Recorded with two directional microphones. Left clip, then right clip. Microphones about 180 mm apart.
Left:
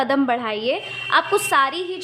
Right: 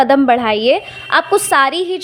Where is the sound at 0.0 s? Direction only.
30° right (ahead or behind).